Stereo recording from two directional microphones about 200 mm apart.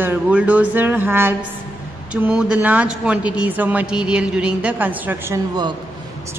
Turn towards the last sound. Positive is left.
turn(degrees=-15)  # may be behind; listen again after turning